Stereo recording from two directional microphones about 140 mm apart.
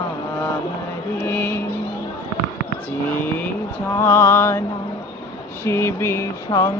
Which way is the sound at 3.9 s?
20° left (ahead or behind).